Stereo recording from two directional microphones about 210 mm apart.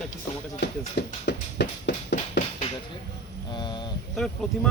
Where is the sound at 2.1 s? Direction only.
35° left (ahead or behind).